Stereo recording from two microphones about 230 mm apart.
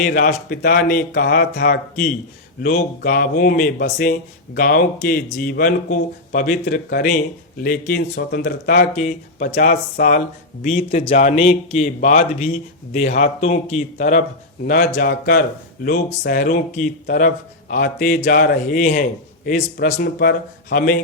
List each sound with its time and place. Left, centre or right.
0.0 s speech: left